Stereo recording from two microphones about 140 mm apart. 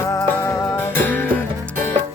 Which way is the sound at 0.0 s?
20° left (ahead or behind).